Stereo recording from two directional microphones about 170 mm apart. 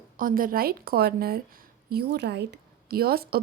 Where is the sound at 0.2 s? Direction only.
55° right (ahead or behind).